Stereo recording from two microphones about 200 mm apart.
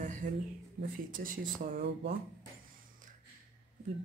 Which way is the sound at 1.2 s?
45° right (ahead or behind).